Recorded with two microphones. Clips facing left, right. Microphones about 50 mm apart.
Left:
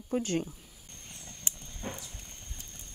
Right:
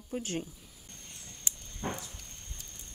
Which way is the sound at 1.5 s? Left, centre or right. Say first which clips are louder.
Even; left.